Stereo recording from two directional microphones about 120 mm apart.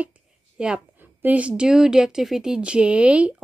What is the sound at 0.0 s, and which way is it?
A woman's voice, 10° right (ahead or behind).